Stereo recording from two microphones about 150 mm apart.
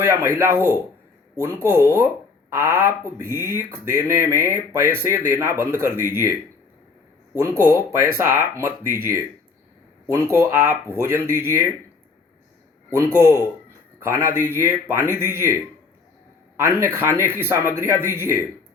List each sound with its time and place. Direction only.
0.0 s speech: 20° right (ahead or behind)
7.3 s speech: 15° right (ahead or behind)
13.1 s speech: 20° right (ahead or behind)